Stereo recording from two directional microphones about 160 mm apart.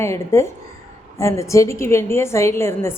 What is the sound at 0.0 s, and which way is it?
A woman's voice, 15° left (ahead or behind).